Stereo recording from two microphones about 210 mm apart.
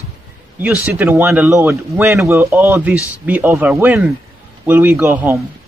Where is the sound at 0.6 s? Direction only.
5° right (ahead or behind).